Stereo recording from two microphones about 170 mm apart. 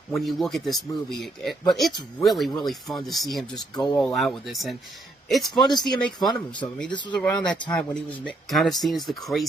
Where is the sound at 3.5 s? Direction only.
25° left (ahead or behind).